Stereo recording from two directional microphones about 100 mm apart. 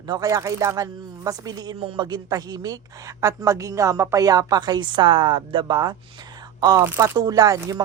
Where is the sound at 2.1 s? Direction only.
40° right (ahead or behind).